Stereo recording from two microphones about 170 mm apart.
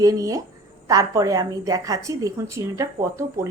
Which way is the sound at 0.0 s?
20° right (ahead or behind).